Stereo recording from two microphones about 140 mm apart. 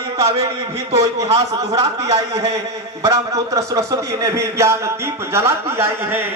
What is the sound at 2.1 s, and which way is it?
A man's voice, 25° right (ahead or behind).